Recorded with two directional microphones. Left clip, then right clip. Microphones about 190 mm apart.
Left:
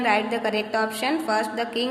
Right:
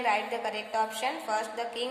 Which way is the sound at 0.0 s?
10° left (ahead or behind).